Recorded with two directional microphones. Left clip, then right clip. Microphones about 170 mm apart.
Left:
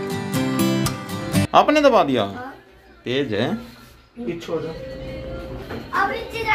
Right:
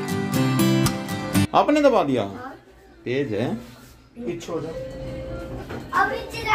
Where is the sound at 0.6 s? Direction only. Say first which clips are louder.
Even; centre (ahead or behind).